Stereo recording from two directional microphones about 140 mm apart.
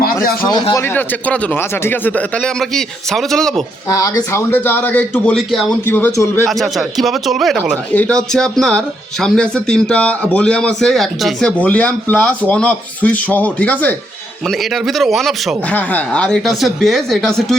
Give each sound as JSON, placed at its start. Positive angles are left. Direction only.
{"t": 0.7, "sound": "a man's voice", "side_deg": 15}
{"t": 3.8, "sound": "a man's voice", "side_deg": 25}
{"t": 6.5, "sound": "a man's voice", "side_deg": 0}
{"t": 14.4, "sound": "speech", "side_deg": 0}
{"t": 15.7, "sound": "speech", "side_deg": 10}